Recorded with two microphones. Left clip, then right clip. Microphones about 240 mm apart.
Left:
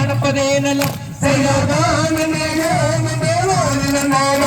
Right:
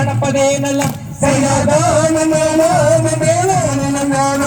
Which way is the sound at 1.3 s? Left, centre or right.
Right.